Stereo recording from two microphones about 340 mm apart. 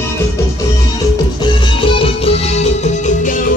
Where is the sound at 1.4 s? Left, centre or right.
Centre.